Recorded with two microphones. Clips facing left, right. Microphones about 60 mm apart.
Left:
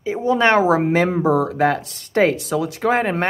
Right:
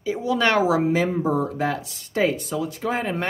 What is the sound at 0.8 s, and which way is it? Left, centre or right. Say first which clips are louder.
Speech: left 4 dB; left.